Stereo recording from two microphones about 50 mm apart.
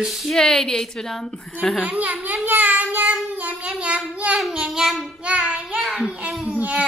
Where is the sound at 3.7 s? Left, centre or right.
Right.